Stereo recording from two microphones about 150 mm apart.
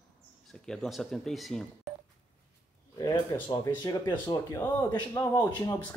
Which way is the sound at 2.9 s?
25° left (ahead or behind).